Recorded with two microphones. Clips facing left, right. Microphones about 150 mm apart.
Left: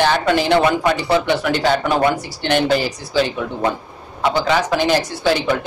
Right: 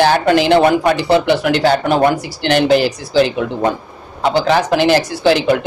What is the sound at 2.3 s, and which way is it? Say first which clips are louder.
Speech: right 3 dB; 80° right.